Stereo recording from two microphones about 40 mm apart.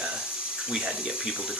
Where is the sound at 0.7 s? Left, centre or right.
Centre.